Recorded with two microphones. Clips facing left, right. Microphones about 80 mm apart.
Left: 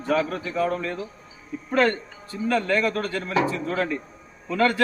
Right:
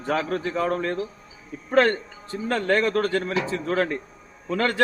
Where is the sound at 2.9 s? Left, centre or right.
Right.